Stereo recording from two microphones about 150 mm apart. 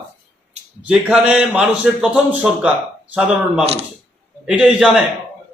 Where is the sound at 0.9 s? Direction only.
10° right (ahead or behind).